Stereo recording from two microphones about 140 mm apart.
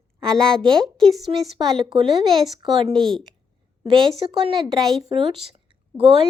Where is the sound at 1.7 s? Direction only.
40° right (ahead or behind).